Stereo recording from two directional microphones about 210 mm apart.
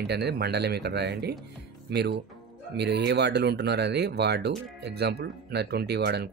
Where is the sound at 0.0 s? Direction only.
50° right (ahead or behind).